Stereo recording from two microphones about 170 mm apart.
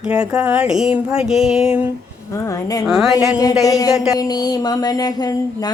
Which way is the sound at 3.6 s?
20° left (ahead or behind).